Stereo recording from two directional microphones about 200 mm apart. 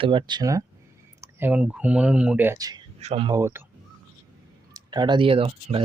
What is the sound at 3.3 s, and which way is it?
Speech, 10° right (ahead or behind).